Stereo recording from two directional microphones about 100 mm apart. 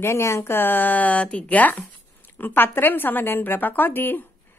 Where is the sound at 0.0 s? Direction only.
25° left (ahead or behind).